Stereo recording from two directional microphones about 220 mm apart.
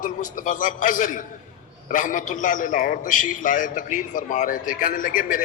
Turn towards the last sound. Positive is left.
turn(degrees=35)  # may be behind; listen again after turning